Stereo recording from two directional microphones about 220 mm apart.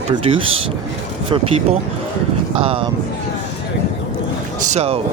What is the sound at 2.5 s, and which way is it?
Speech, 25° right (ahead or behind).